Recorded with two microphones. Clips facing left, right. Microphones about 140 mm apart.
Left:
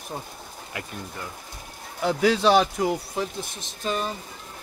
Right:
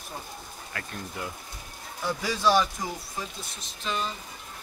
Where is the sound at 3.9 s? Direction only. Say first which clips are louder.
Left 4 dB; 45° left (ahead or behind).